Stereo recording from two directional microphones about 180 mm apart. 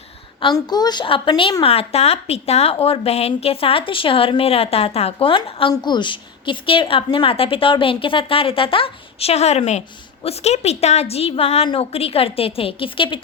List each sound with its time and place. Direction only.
0.3 s a woman's voice: 25° left (ahead or behind)